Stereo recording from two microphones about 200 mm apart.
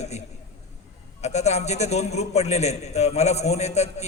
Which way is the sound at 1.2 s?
35° left (ahead or behind).